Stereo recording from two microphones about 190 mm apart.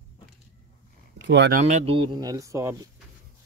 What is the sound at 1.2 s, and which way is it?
Speech, 65° right (ahead or behind).